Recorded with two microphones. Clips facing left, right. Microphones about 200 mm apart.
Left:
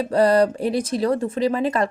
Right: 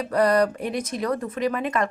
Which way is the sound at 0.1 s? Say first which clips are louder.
Left 3 dB; 30° left (ahead or behind).